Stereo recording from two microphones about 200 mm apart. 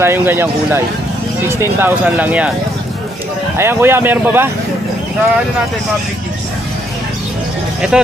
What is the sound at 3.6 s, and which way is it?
Speech, 10° right (ahead or behind).